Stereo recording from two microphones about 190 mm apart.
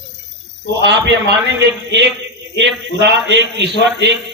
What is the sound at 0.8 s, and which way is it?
Speech, 65° right (ahead or behind).